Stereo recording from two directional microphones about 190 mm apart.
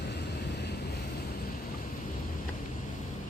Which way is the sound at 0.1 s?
60° left (ahead or behind).